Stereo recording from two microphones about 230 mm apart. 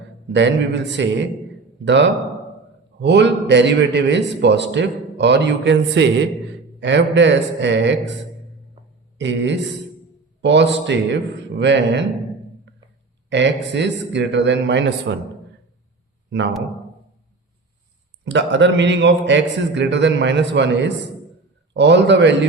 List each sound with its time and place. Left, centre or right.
0.3 s a man's voice: right
9.1 s a man's voice: right
12.7 s a sound: right
13.3 s a man's voice: right
18.3 s a man's voice: right